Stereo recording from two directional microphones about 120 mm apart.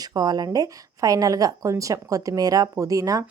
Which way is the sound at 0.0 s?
35° right (ahead or behind).